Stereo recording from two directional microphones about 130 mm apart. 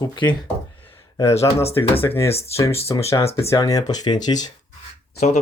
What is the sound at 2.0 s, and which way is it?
Speech, 20° left (ahead or behind).